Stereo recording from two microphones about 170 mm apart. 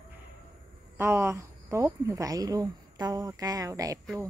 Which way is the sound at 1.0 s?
15° right (ahead or behind).